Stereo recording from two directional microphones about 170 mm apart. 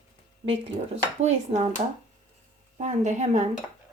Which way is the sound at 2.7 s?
45° right (ahead or behind).